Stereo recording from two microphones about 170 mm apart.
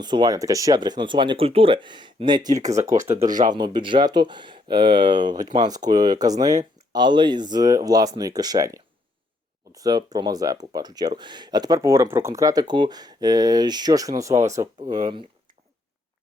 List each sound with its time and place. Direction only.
0.0 s speech: 25° right (ahead or behind)